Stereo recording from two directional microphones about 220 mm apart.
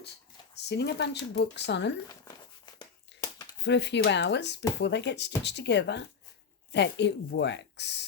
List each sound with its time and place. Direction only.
0.7 s speech: 50° left (ahead or behind)
2.0 s a sound: 20° left (ahead or behind)
3.6 s speech: 50° left (ahead or behind)